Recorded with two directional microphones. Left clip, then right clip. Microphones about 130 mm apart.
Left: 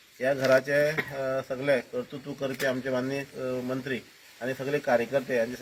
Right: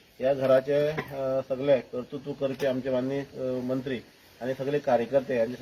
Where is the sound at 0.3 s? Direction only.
5° right (ahead or behind).